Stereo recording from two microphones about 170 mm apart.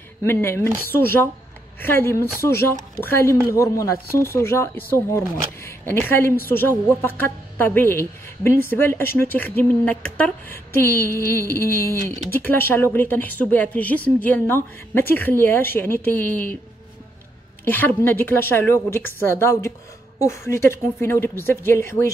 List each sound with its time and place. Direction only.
0.2 s speech: 15° left (ahead or behind)
17.6 s speech: 10° left (ahead or behind)